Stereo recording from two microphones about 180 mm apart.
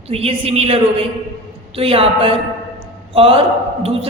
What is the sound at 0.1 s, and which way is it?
Speech, 35° right (ahead or behind).